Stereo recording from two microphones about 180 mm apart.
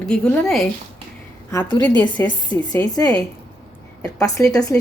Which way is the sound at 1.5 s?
15° left (ahead or behind).